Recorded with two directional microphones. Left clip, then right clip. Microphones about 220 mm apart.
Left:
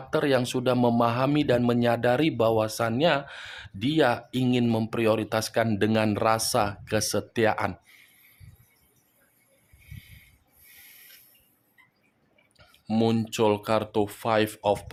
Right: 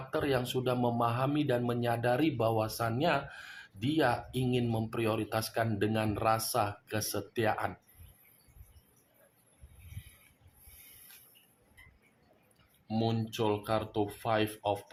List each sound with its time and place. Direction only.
0.1 s speech: 45° left (ahead or behind)
12.9 s speech: 55° left (ahead or behind)